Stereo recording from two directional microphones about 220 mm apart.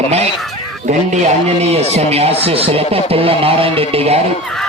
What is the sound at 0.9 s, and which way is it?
A man's voice, 30° right (ahead or behind).